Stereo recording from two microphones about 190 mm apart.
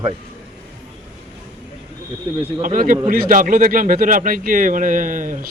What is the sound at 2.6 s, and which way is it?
Speech, 45° right (ahead or behind).